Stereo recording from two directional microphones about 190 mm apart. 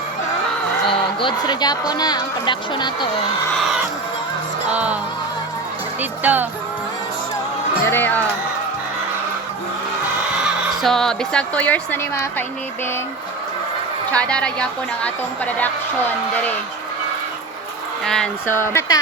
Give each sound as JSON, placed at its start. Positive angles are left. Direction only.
{"t": 1.2, "sound": "speech", "side_deg": 25}
{"t": 4.7, "sound": "music", "side_deg": -5}
{"t": 6.0, "sound": "speech", "side_deg": -10}
{"t": 7.9, "sound": "a woman's voice", "side_deg": 10}
{"t": 10.8, "sound": "a woman's voice", "side_deg": 0}
{"t": 14.1, "sound": "a woman's voice", "side_deg": 5}
{"t": 18.0, "sound": "a woman's voice", "side_deg": 5}